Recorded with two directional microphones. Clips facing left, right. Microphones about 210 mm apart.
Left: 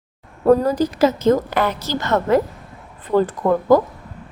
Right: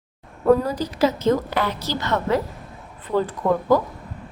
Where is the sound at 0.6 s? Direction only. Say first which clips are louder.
Left 5 dB; 45° left (ahead or behind).